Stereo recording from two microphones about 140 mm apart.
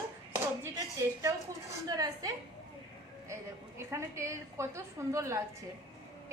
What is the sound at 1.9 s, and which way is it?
Speech, 30° right (ahead or behind).